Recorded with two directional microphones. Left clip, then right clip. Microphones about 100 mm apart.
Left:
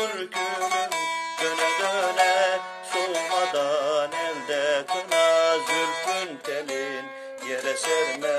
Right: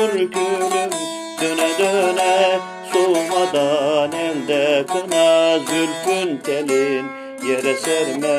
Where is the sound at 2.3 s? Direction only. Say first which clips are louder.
Right 6 dB; 20° left (ahead or behind).